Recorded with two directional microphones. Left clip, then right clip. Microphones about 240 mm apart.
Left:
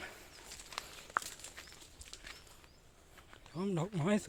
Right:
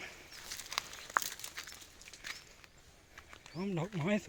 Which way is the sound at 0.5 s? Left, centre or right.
Right.